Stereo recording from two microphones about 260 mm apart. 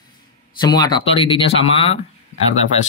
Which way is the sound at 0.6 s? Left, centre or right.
Centre.